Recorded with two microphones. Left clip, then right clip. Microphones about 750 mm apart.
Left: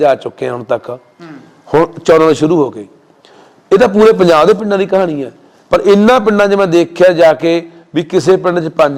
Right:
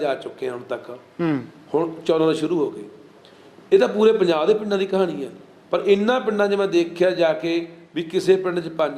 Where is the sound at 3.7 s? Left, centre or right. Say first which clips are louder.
Left 9 dB; left.